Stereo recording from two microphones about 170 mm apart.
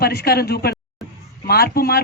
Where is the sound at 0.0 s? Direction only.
65° left (ahead or behind).